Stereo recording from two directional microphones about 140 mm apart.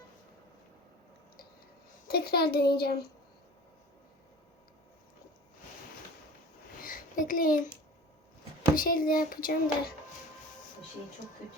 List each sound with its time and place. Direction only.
2.0 s a child's voice: 90° left
6.8 s a child's voice: 75° left (ahead or behind)
8.7 s a child's voice: 90° left